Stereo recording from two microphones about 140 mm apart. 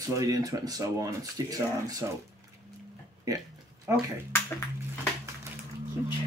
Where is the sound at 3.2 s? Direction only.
25° right (ahead or behind).